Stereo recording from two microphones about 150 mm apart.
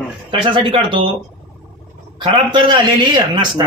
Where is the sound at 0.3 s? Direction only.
35° right (ahead or behind).